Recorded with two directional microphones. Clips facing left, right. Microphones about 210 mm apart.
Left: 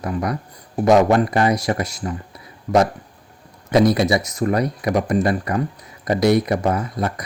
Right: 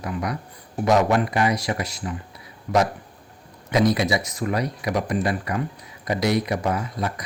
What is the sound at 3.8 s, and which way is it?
Speech, 55° left (ahead or behind).